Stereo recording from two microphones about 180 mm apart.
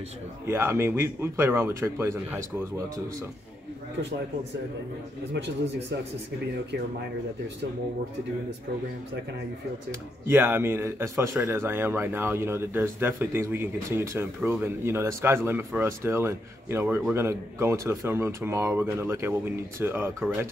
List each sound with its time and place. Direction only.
0.5 s speech: 15° right (ahead or behind)
5.3 s speech: 75° right (ahead or behind)
9.8 s speech: 10° right (ahead or behind)